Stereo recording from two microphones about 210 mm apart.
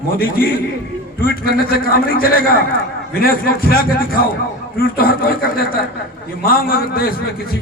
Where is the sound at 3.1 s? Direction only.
45° left (ahead or behind).